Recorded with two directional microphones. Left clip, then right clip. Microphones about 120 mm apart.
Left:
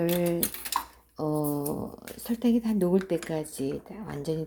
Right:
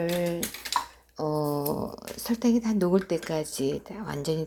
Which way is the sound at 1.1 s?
25° left (ahead or behind).